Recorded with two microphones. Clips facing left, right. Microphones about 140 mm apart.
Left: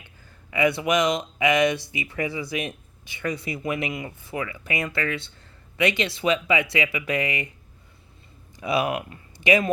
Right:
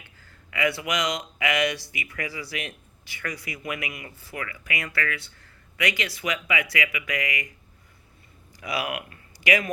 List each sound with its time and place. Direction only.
0.5 s speech: 25° left (ahead or behind)
8.6 s speech: 25° left (ahead or behind)